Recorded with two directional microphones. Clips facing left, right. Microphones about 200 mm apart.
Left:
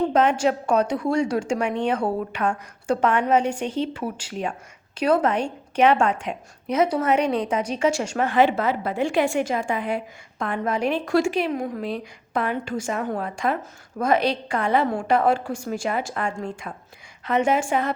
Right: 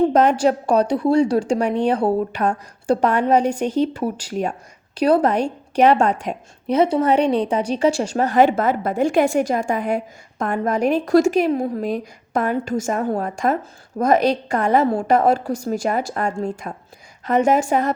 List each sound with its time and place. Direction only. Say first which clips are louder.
0.1 s a woman's voice: right 4 dB; 40° right (ahead or behind)